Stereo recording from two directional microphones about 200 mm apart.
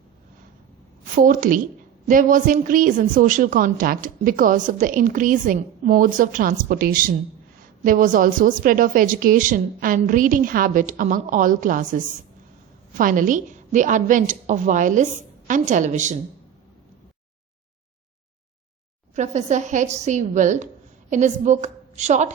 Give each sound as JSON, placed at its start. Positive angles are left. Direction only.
{"t": 1.2, "sound": "a woman's voice", "side_deg": -40}
{"t": 19.1, "sound": "a woman's voice", "side_deg": -35}